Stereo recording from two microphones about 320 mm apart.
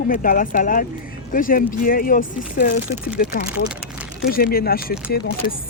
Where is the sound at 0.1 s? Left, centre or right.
Left.